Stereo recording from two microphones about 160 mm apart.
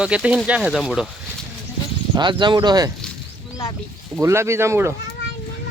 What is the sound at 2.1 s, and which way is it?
Speech, 30° right (ahead or behind).